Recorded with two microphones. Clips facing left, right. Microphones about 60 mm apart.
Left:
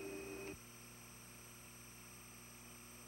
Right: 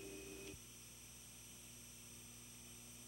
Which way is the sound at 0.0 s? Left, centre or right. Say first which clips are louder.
Left 6 dB; left.